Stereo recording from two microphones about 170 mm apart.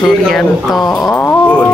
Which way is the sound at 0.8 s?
20° left (ahead or behind).